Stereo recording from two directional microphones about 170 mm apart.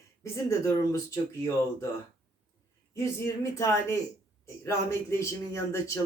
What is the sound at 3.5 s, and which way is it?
Speech, 15° left (ahead or behind).